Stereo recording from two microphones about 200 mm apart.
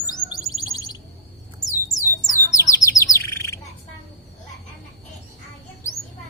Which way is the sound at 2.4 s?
15° left (ahead or behind).